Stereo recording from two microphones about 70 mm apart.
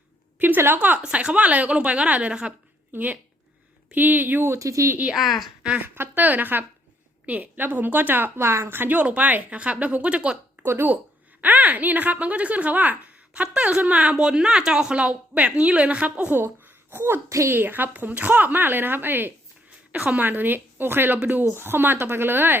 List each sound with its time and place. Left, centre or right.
0.3 s a woman's voice: right
1.0 s a woman's voice: centre; by 4.9 s right
5.1 s a woman's voice: centre
5.6 s a woman's voice: centre
10.6 s a woman's voice: right
16.4 s a woman's voice: right
17.5 s a woman's voice: right